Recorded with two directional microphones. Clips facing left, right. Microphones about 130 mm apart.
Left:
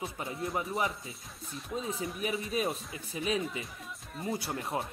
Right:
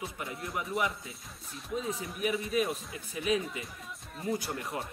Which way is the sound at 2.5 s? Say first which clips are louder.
Right 2 dB; 30° left (ahead or behind).